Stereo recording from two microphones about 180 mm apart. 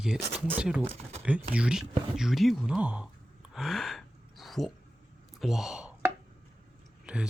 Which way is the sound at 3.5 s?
Centre (ahead or behind).